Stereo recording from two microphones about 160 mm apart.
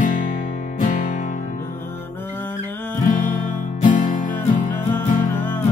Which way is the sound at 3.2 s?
55° left (ahead or behind).